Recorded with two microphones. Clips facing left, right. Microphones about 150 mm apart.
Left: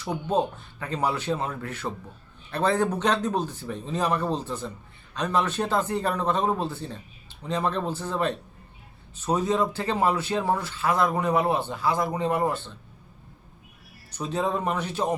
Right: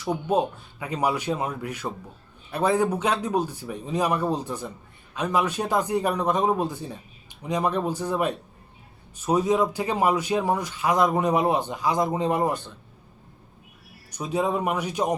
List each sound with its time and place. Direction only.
0.0 s speech: 10° right (ahead or behind)
14.1 s speech: 10° right (ahead or behind)